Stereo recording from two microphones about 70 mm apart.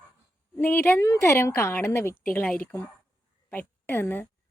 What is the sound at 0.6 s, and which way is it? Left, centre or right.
Speech, left.